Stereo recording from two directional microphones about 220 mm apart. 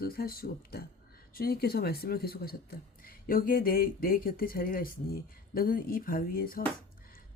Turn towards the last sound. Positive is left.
turn(degrees=40)  # may be behind; listen again after turning